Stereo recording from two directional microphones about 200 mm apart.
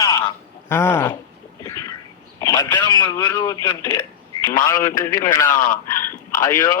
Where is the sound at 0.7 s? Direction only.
10° left (ahead or behind).